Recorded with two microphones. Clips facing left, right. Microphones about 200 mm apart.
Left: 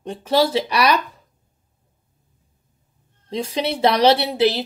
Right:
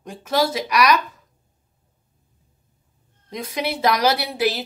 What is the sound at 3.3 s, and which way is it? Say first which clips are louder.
A woman's voice: left 3 dB; 30° left (ahead or behind).